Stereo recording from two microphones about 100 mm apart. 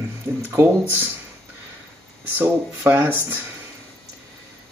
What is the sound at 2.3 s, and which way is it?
Speech, 20° right (ahead or behind).